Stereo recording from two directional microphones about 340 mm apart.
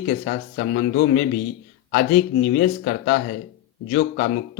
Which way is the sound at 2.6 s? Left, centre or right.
Left.